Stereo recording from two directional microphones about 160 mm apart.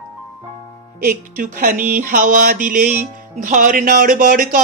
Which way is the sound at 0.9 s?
60° right (ahead or behind).